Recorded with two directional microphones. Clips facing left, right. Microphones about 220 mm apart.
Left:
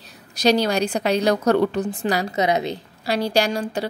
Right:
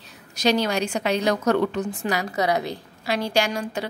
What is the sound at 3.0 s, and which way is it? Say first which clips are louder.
Speech: left 3 dB; 35° left (ahead or behind).